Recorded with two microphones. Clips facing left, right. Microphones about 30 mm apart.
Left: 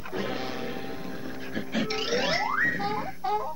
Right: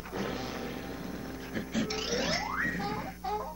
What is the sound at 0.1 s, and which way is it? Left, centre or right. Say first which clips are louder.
Music: left 4 dB; left.